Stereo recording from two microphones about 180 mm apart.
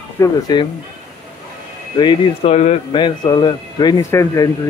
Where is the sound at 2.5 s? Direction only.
40° left (ahead or behind).